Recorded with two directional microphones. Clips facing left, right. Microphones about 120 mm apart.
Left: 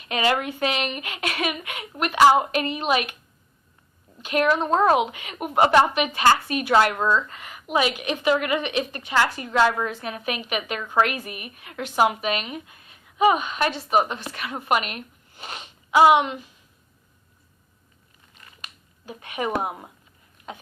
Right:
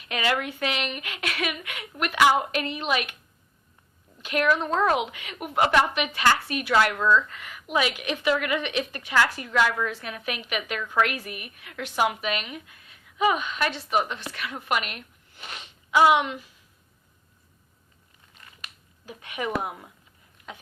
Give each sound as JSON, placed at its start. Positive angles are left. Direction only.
{"t": 0.3, "sound": "a woman's voice", "side_deg": 35}
{"t": 4.2, "sound": "a woman's voice", "side_deg": 35}
{"t": 19.0, "sound": "a woman's voice", "side_deg": 40}
{"t": 19.6, "sound": "speech", "side_deg": 30}